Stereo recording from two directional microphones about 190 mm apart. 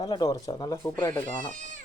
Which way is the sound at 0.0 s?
25° left (ahead or behind).